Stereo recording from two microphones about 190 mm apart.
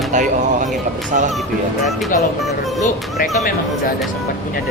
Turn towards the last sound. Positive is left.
turn(degrees=50)  # may be behind; listen again after turning